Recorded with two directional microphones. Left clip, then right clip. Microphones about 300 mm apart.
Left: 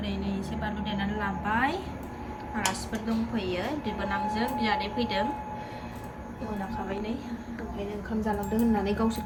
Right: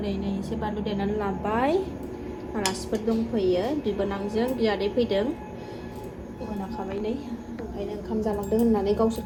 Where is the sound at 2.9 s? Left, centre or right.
Centre.